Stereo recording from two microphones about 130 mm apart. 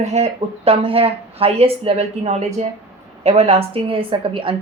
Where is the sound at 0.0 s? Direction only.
55° right (ahead or behind).